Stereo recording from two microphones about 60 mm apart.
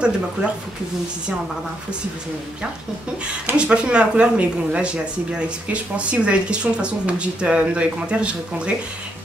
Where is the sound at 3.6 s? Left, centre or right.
Centre.